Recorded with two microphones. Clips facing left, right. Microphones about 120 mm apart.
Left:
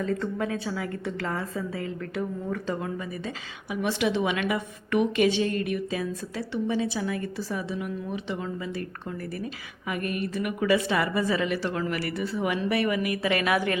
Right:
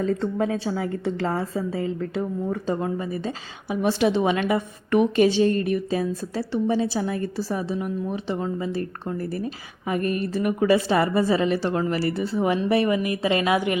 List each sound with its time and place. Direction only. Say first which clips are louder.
0.0 s a woman's voice: right 5 dB; 25° right (ahead or behind)